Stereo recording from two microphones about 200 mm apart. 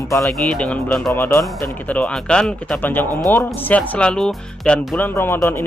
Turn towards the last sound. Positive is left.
turn(degrees=10)  # may be behind; listen again after turning